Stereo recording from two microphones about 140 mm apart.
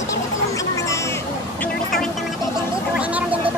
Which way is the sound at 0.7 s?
20° left (ahead or behind).